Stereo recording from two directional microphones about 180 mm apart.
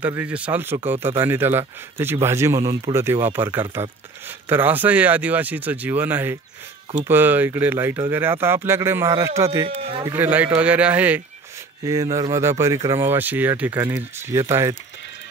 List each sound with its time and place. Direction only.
0.0 s speech: 10° right (ahead or behind)
9.7 s speech: 30° right (ahead or behind)
10.0 s speech: 10° right (ahead or behind)